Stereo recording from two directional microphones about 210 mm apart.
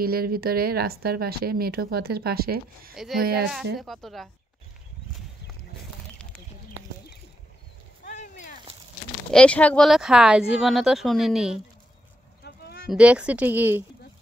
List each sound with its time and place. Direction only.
0.0 s a woman's voice: 45° right (ahead or behind)
3.7 s speech: centre (ahead or behind)
8.0 s a sound: 35° left (ahead or behind)
9.3 s speech: 5° left (ahead or behind)
12.4 s a sound: 45° left (ahead or behind)
12.9 s speech: 5° right (ahead or behind)